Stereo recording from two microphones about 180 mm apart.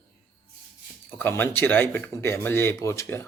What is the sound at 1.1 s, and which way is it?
Speech, 10° left (ahead or behind).